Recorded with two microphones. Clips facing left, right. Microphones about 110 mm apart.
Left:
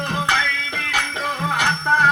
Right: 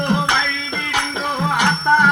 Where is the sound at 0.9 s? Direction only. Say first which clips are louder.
Right 3 dB; 25° right (ahead or behind).